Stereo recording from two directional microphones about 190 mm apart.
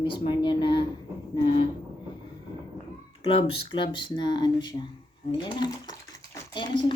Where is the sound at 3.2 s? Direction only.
30° left (ahead or behind).